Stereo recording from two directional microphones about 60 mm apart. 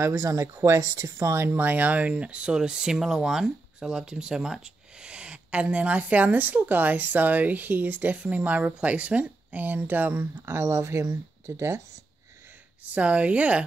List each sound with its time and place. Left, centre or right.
0.0 s speech: right
0.7 s speech: right
1.3 s speech: right
12.8 s speech: right